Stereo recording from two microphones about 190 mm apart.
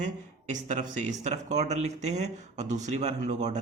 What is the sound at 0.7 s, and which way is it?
Speech, 40° right (ahead or behind).